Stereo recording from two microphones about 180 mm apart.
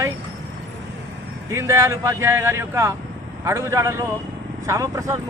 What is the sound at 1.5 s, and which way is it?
A man's voice, 15° right (ahead or behind).